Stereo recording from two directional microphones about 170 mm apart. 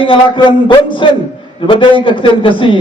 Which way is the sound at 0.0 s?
30° left (ahead or behind).